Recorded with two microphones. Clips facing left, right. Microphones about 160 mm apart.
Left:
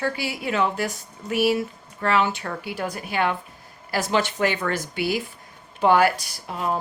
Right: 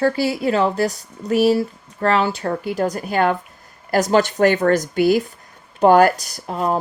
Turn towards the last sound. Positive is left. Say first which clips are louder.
# right 5 dB
turn(degrees=-40)  # may be behind; listen again after turning